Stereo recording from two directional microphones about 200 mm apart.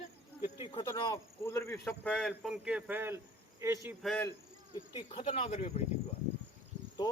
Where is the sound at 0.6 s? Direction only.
25° left (ahead or behind); by 3.2 s 10° right (ahead or behind).